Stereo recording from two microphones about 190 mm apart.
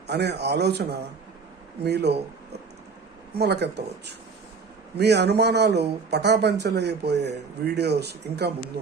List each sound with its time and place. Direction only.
0.1 s a man's voice: 60° right (ahead or behind)
3.3 s a man's voice: 60° right (ahead or behind)